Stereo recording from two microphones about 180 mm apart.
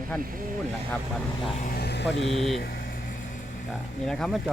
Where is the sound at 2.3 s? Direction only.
Centre (ahead or behind).